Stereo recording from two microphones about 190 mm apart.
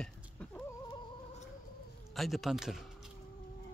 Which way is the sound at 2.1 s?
Centre (ahead or behind).